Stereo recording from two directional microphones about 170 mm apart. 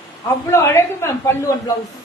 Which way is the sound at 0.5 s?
15° left (ahead or behind).